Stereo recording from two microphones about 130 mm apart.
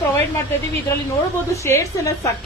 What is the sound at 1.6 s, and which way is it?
Speech, 25° left (ahead or behind).